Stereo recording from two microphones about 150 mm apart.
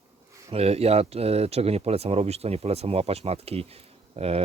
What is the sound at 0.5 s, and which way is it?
Speech, 40° right (ahead or behind).